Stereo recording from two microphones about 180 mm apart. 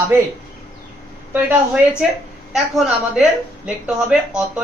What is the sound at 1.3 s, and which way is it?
A woman's voice, 10° right (ahead or behind).